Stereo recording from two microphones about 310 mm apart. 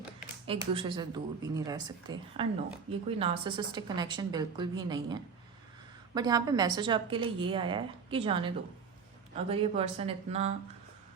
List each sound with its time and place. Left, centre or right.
0.4 s a woman's voice: centre